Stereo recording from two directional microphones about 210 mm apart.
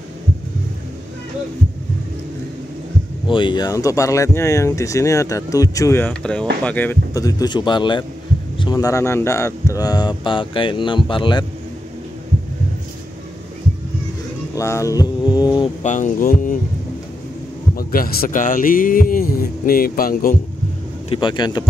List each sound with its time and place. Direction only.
3.3 s speech: 25° left (ahead or behind)
14.5 s mantra: 15° left (ahead or behind)
15.8 s speech: 35° left (ahead or behind)
17.7 s speech: 45° left (ahead or behind)
21.1 s speech: 20° left (ahead or behind)